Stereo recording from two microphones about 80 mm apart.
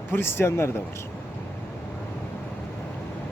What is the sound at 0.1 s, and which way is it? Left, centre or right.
Speech, left.